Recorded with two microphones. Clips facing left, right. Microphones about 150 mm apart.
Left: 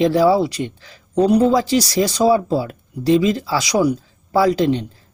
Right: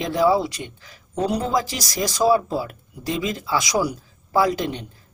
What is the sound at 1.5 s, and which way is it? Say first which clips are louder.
Speech: left 8 dB; 25° left (ahead or behind).